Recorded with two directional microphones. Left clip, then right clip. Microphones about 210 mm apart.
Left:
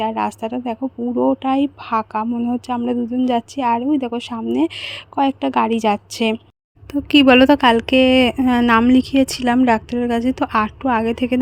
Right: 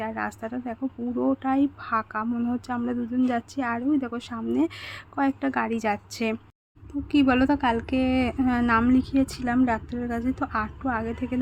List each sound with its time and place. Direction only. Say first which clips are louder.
0.0 s speech: left 10 dB; 25° left (ahead or behind)
1.1 s speech: left 9 dB; 15° left (ahead or behind)
1.4 s speech: left 6 dB; 25° left (ahead or behind)
7.1 s a woman's voice: left 11 dB; 40° left (ahead or behind)